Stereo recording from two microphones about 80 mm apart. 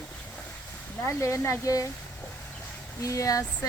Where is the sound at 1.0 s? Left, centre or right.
Left.